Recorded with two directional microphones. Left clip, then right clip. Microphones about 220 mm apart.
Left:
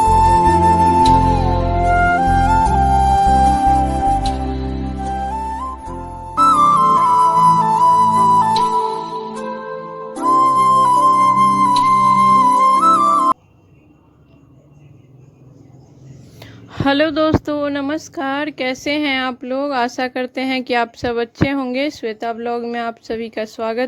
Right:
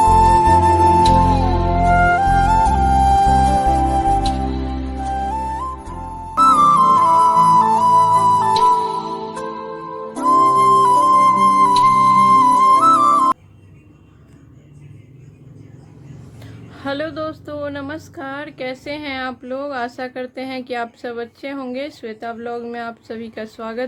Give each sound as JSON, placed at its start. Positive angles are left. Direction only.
{"t": 0.0, "sound": "music", "side_deg": 0}
{"t": 4.8, "sound": "flute", "side_deg": 0}
{"t": 10.2, "sound": "music", "side_deg": 0}
{"t": 16.4, "sound": "a sound", "side_deg": 40}